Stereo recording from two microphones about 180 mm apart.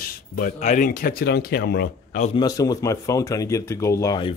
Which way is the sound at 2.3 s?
20° left (ahead or behind).